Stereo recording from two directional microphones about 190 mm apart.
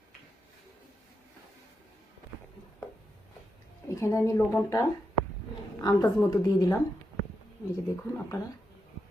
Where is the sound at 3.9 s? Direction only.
15° left (ahead or behind).